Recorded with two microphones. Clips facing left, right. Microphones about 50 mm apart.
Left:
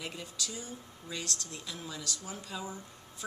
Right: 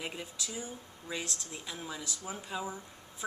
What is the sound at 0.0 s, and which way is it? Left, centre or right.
Speech, centre.